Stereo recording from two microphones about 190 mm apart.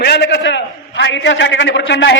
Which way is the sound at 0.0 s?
65° left (ahead or behind).